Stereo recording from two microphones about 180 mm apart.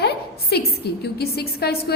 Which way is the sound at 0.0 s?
65° left (ahead or behind).